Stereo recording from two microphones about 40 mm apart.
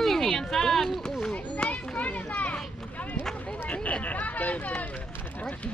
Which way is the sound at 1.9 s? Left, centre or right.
Left.